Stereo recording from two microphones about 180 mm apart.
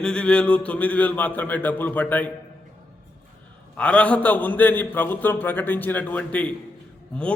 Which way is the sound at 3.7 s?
5° left (ahead or behind).